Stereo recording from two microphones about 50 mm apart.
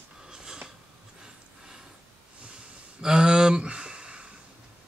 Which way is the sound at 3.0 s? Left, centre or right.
Centre.